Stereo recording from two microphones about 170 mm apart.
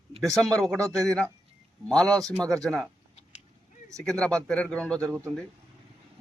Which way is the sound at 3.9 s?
5° left (ahead or behind).